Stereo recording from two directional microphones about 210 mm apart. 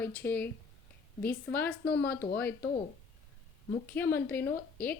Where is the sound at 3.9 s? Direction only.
10° left (ahead or behind).